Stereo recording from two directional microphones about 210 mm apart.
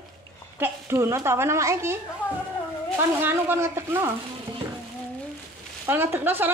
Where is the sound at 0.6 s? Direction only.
10° right (ahead or behind).